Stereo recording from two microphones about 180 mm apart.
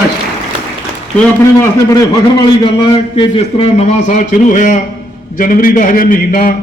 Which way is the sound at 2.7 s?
30° left (ahead or behind).